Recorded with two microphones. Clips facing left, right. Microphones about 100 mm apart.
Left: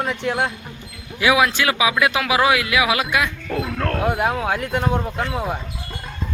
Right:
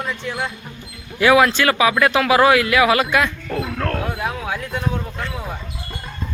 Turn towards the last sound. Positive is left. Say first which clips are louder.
# left 3 dB
turn(degrees=65)  # may be behind; listen again after turning